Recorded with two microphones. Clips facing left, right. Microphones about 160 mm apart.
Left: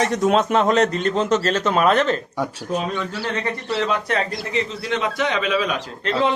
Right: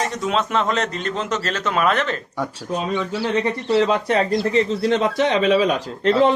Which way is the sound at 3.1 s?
15° right (ahead or behind).